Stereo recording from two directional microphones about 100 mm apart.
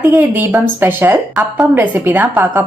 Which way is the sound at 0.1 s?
20° right (ahead or behind).